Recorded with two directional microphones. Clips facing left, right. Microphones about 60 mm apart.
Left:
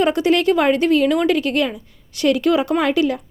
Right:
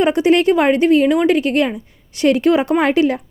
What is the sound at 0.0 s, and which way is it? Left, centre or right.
A woman's voice, right.